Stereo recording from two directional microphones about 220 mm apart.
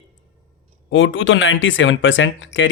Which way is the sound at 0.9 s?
60° left (ahead or behind).